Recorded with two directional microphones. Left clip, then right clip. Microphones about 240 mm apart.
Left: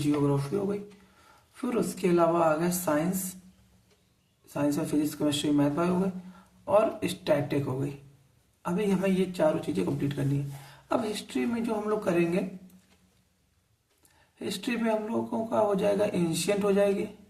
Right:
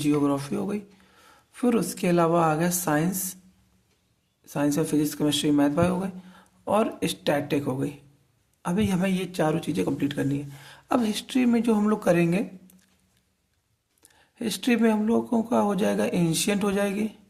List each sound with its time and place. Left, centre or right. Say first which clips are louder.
0.0 s speech: right 3 dB; right
4.4 s speech: right 4 dB; right
14.3 s speech: right 7 dB; right